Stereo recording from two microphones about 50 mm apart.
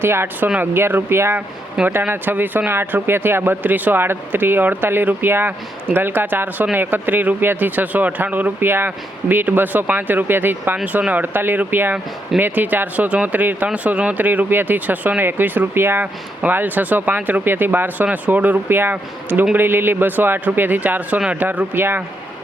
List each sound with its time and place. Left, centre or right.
0.0 s speech: right
2.0 s speech: right
16.4 s speech: right
18.7 s speech: right
21.8 s speech: right